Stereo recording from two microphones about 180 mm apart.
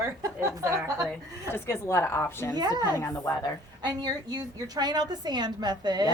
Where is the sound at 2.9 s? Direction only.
15° left (ahead or behind).